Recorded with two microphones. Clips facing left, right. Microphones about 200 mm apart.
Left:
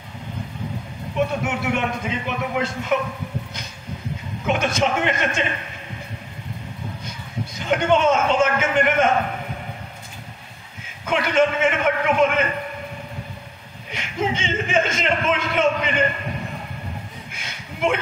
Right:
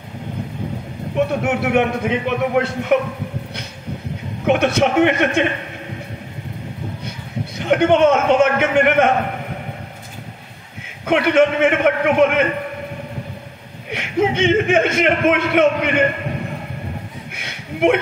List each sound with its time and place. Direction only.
1.4 s speech: 60° right (ahead or behind)
4.5 s speech: 65° right (ahead or behind)
7.5 s speech: 60° right (ahead or behind)
11.1 s speech: 60° right (ahead or behind)
13.9 s speech: 60° right (ahead or behind)
17.4 s a sound: 60° right (ahead or behind)